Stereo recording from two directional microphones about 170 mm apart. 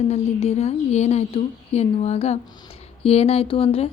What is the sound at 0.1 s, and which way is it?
A woman's voice, 40° left (ahead or behind).